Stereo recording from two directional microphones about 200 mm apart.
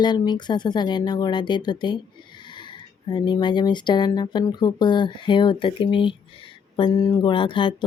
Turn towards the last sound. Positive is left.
turn(degrees=25)  # may be behind; listen again after turning